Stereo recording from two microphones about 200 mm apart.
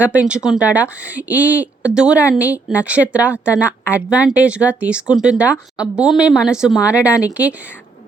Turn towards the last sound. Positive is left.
turn(degrees=-5)  # may be behind; listen again after turning